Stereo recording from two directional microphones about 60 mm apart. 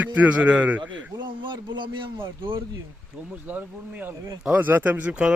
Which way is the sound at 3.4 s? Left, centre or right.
Right.